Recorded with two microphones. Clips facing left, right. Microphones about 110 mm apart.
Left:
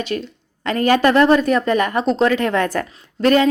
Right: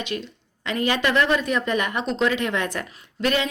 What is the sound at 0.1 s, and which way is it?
A woman's voice, 45° left (ahead or behind).